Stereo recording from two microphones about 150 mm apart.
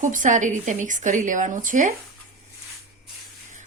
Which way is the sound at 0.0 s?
60° right (ahead or behind).